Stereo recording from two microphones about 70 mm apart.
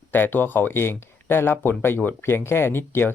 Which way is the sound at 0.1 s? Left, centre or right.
Left.